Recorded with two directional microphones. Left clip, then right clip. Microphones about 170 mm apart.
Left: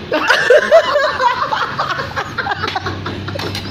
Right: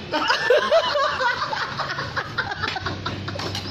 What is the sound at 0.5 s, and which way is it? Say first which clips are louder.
Snicker: left 9 dB; 5° left (ahead or behind).